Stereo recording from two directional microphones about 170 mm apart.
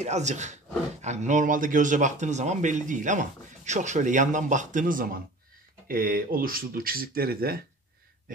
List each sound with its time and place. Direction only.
0.0 s a man's voice: 40° right (ahead or behind); by 7.6 s 60° right (ahead or behind)